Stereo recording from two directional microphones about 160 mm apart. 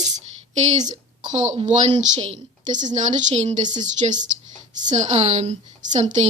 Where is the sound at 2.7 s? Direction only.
50° right (ahead or behind).